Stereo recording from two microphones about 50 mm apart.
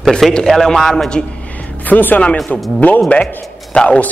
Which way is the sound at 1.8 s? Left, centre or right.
Left.